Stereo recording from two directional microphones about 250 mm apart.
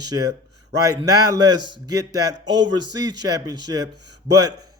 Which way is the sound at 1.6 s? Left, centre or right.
Right.